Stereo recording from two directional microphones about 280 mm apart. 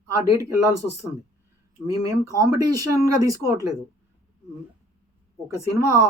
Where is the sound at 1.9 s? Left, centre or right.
Centre.